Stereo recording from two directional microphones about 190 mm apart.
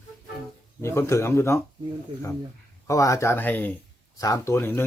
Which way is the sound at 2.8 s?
15° left (ahead or behind).